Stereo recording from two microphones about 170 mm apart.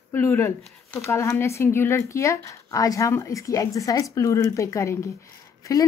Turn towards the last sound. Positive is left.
turn(degrees=20)  # may be behind; listen again after turning